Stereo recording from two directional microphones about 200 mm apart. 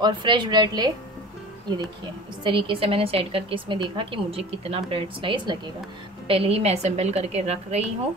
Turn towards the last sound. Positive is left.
turn(degrees=-35)  # may be behind; listen again after turning